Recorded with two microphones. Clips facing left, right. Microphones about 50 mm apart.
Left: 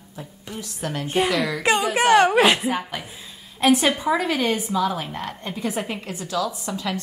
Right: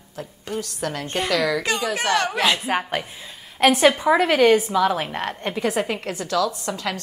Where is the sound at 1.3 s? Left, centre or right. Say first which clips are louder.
Right 3 dB; right.